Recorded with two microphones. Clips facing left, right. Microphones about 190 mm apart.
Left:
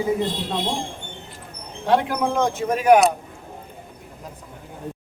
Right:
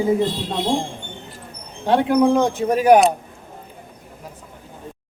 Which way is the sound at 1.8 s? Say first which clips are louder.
Right 5 dB; 35° right (ahead or behind).